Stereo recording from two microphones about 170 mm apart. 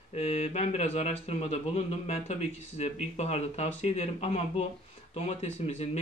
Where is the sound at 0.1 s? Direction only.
40° left (ahead or behind).